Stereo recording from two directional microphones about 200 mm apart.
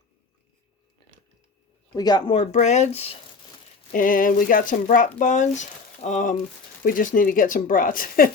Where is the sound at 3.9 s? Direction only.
45° left (ahead or behind).